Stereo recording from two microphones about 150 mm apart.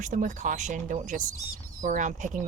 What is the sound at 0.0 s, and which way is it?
Speech, 60° right (ahead or behind).